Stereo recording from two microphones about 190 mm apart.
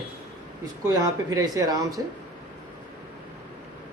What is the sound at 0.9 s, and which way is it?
A man's voice, 15° right (ahead or behind).